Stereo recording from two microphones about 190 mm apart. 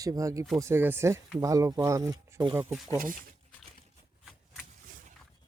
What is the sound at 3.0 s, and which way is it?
Speech, 45° right (ahead or behind).